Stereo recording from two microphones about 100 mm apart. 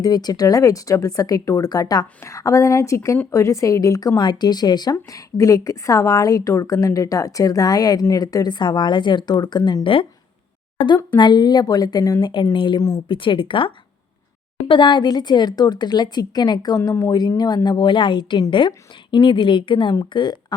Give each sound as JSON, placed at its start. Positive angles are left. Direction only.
{"t": 0.0, "sound": "a woman's voice", "side_deg": 45}
{"t": 9.8, "sound": "speech", "side_deg": 65}
{"t": 10.8, "sound": "speech", "side_deg": 50}
{"t": 12.3, "sound": "speech", "side_deg": 50}
{"t": 19.9, "sound": "speech", "side_deg": 40}